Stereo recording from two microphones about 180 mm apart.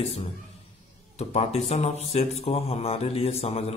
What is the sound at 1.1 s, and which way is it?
Speech, 35° left (ahead or behind).